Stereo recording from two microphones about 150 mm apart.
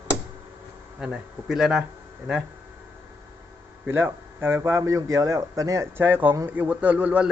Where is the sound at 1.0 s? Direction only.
5° right (ahead or behind).